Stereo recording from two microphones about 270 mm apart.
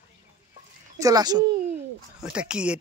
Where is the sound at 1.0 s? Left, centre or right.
Centre.